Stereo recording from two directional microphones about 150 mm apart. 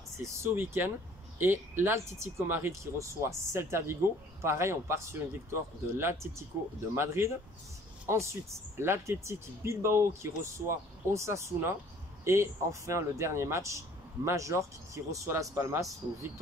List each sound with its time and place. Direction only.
0.2 s speech: 15° right (ahead or behind)